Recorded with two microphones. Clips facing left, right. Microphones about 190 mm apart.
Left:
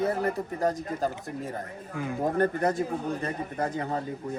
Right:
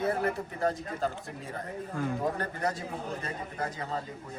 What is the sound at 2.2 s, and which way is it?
Speech, 50° left (ahead or behind).